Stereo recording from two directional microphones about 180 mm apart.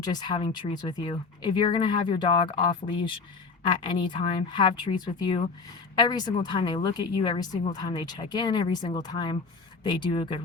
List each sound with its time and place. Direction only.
0.0 s speech: 25° left (ahead or behind)